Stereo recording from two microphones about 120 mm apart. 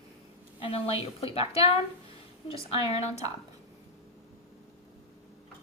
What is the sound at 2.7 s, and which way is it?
Speech, 55° left (ahead or behind).